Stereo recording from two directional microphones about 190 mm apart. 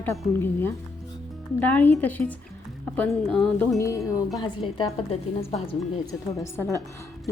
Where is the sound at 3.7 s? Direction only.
15° left (ahead or behind).